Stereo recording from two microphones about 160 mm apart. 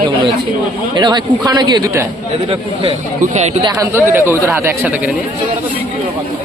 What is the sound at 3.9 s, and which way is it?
Speech, 15° right (ahead or behind).